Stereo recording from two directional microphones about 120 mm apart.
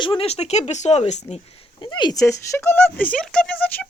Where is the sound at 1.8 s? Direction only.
40° left (ahead or behind).